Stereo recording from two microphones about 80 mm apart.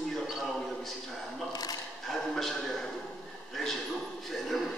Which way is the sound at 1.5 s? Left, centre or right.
Left.